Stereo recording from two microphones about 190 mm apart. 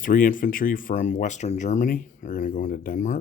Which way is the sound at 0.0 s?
45° left (ahead or behind).